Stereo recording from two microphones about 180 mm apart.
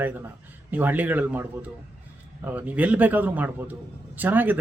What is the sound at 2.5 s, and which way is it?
Speech, 10° right (ahead or behind).